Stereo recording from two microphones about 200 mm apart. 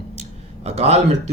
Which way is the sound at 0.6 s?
30° right (ahead or behind).